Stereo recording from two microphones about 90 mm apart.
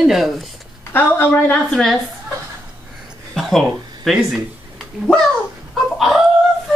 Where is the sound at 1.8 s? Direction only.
Centre (ahead or behind).